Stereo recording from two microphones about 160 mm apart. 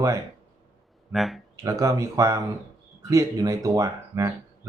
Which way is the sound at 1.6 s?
20° right (ahead or behind).